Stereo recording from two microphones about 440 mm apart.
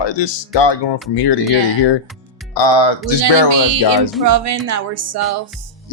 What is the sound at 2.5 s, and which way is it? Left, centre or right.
Music, left.